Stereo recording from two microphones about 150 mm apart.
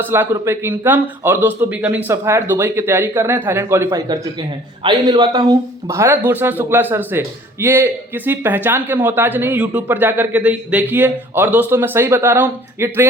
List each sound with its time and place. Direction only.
0.0 s speech: 15° right (ahead or behind)